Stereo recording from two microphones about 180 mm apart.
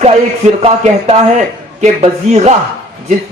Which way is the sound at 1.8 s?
40° right (ahead or behind).